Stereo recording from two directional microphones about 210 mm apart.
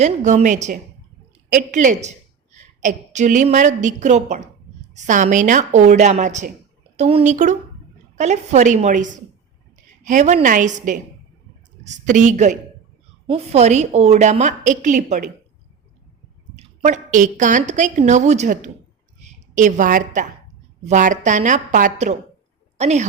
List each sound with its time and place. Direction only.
0.0 s a woman's voice: 35° right (ahead or behind)
16.8 s a woman's voice: 35° right (ahead or behind)